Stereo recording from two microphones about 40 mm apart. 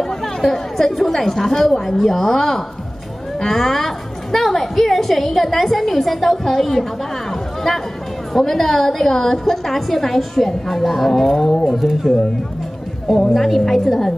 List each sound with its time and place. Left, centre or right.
0.2 s a woman's voice: centre
8.3 s a woman's voice: centre
13.3 s a woman's voice: centre